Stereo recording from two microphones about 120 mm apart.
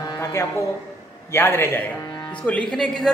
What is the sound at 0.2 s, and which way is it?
Speech, 20° left (ahead or behind).